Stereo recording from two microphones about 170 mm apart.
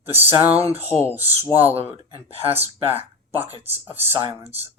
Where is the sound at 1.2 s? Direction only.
35° right (ahead or behind).